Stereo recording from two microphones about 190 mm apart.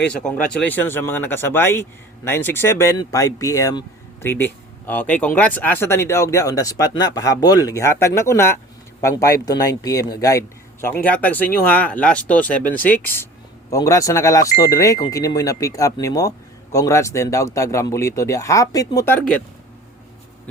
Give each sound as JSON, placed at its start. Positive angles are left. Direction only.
{"t": 0.1, "sound": "speech", "side_deg": 5}